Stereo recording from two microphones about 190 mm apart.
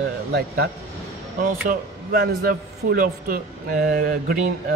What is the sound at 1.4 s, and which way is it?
A man's voice, 45° right (ahead or behind).